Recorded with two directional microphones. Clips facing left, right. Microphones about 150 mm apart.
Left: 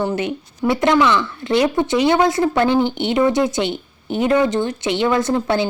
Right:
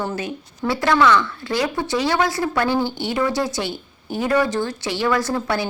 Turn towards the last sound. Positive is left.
turn(degrees=20)  # may be behind; listen again after turning